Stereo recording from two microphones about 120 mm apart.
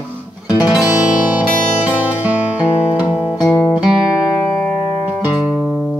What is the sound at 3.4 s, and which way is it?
Music, 30° left (ahead or behind).